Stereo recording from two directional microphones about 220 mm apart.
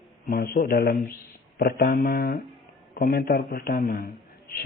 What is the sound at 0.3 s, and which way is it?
A man's voice, 45° left (ahead or behind).